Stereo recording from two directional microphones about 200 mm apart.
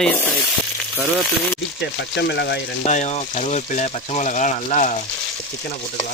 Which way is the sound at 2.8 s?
35° left (ahead or behind).